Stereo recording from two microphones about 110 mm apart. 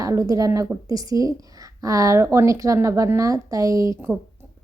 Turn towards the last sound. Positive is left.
turn(degrees=-25)  # may be behind; listen again after turning